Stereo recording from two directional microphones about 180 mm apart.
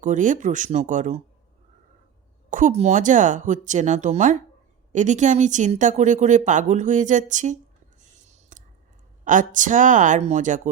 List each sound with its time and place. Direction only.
0.0 s speech: 45° right (ahead or behind)
2.5 s speech: 45° right (ahead or behind)
8.3 s whispering: 45° right (ahead or behind)
9.2 s speech: 45° right (ahead or behind)